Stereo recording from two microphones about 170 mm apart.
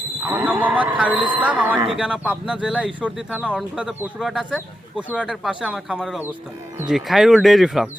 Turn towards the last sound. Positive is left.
turn(degrees=0)  # may be behind; listen again after turning